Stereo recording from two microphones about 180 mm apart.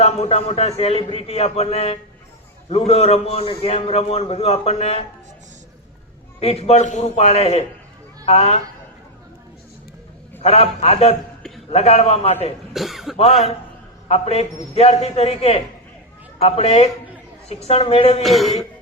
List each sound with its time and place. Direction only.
0.0 s a man's voice: 35° left (ahead or behind)
6.4 s a man's voice: 35° left (ahead or behind)
10.4 s a man's voice: 35° left (ahead or behind)
12.7 s speech: centre (ahead or behind)
14.1 s a man's voice: 35° left (ahead or behind)
18.2 s speech: centre (ahead or behind)